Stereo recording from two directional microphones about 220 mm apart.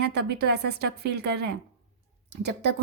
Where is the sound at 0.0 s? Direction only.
50° right (ahead or behind).